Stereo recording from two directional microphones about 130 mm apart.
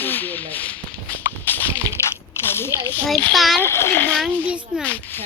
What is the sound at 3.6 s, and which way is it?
Speech, 20° left (ahead or behind).